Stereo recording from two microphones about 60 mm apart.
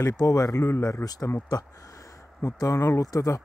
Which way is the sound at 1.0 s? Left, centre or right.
Left.